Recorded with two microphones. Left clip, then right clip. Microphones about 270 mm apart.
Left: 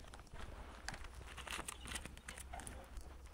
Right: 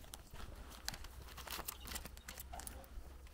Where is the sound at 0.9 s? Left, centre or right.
Centre.